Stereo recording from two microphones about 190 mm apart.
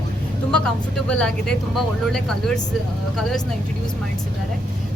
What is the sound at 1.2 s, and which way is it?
A woman's voice, 5° left (ahead or behind).